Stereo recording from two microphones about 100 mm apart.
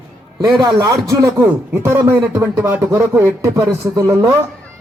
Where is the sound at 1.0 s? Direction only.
30° right (ahead or behind).